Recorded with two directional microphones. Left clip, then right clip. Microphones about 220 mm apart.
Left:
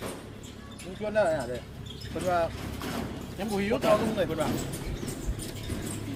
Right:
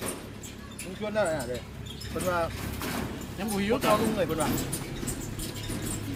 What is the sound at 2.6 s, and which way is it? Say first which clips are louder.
Vehicle: right 1 dB; 50° right (ahead or behind).